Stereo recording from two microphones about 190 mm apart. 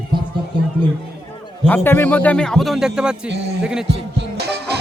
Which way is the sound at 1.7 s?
10° left (ahead or behind).